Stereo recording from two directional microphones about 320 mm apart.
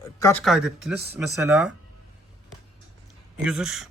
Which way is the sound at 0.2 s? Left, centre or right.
Centre.